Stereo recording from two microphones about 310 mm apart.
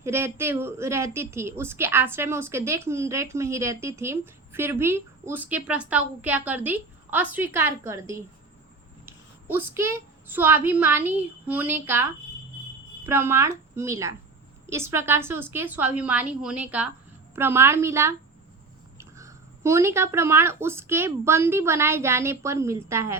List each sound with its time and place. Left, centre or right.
0.0 s a woman's voice: centre
9.0 s a sound: centre
9.7 s a woman's voice: centre
13.1 s a woman's voice: centre